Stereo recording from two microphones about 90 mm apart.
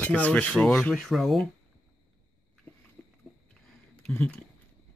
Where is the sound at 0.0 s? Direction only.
15° left (ahead or behind).